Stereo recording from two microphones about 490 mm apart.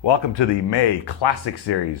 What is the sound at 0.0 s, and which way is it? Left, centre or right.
Speech, left.